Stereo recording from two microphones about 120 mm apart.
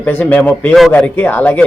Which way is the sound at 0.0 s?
15° left (ahead or behind).